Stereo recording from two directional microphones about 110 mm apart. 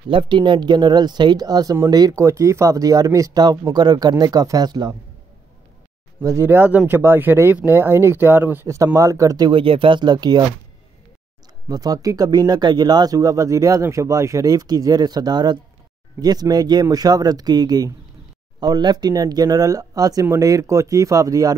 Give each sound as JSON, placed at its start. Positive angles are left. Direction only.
{"t": 0.1, "sound": "speech", "side_deg": -45}
{"t": 6.2, "sound": "speech", "side_deg": -25}
{"t": 9.5, "sound": "speech", "side_deg": -55}
{"t": 11.7, "sound": "speech", "side_deg": -35}